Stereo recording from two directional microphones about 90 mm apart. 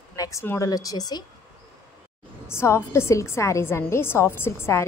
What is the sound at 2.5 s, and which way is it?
A woman's voice, 30° left (ahead or behind).